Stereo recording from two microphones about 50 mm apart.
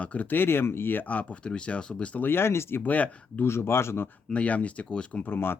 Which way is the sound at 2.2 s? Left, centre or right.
Left.